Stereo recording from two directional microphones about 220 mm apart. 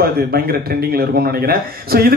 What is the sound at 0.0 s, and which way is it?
Speech, 45° right (ahead or behind).